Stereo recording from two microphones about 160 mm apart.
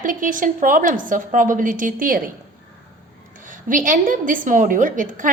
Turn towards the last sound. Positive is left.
turn(degrees=-55)  # may be behind; listen again after turning